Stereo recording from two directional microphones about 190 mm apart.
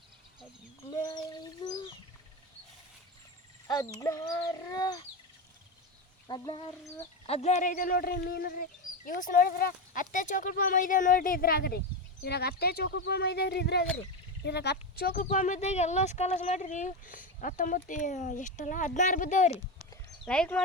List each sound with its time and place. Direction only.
0.9 s a sound: 20° left (ahead or behind)
3.7 s speech: 20° left (ahead or behind)
6.2 s speech: 25° left (ahead or behind)
7.3 s speech: 35° left (ahead or behind)
20.2 s speech: 5° left (ahead or behind)